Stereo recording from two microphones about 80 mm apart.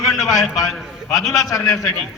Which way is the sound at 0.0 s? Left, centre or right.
Centre.